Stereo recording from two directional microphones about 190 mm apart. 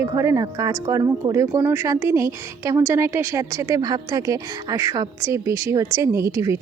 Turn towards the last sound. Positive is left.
turn(degrees=-15)  # may be behind; listen again after turning